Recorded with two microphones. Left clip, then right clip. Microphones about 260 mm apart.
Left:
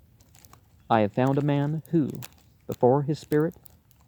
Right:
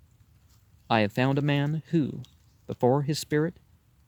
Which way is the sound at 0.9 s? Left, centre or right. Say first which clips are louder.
Left 2 dB; right.